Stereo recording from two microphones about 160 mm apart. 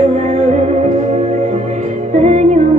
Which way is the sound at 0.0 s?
45° right (ahead or behind).